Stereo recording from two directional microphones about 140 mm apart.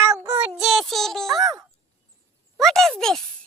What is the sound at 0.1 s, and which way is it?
Child singing, 20° right (ahead or behind).